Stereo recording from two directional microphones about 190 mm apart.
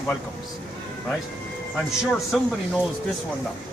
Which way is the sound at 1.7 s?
Centre (ahead or behind).